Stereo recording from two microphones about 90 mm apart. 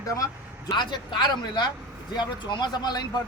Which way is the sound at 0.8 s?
55° left (ahead or behind).